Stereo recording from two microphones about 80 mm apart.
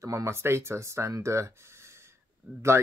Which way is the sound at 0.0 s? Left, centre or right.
Right.